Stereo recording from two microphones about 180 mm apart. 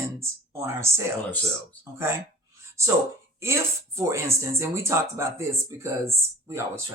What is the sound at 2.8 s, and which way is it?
Speech, 15° right (ahead or behind).